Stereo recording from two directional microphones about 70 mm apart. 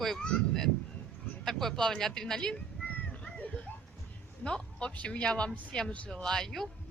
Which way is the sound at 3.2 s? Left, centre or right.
Centre.